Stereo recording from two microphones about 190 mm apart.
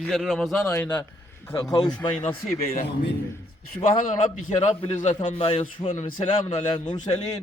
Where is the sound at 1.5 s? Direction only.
20° left (ahead or behind).